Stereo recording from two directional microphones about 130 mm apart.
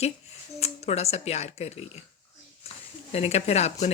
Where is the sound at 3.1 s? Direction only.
55° left (ahead or behind).